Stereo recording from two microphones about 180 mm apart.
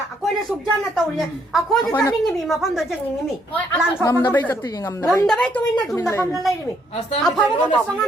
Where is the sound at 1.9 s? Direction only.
15° left (ahead or behind).